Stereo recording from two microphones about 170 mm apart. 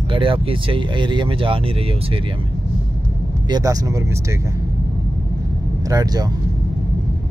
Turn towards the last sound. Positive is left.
turn(degrees=-20)  # may be behind; listen again after turning